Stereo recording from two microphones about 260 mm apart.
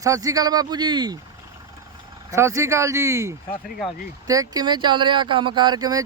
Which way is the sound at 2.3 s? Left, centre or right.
Centre.